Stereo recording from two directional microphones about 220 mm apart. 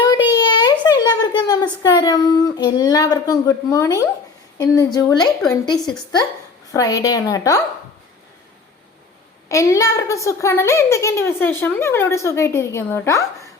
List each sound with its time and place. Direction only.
0.1 s a sound: 20° left (ahead or behind)
4.5 s a child's voice: 15° left (ahead or behind)
5.7 s a woman's voice: 5° left (ahead or behind)
6.7 s a child's voice: 15° left (ahead or behind)
9.5 s a child's voice: 15° left (ahead or behind)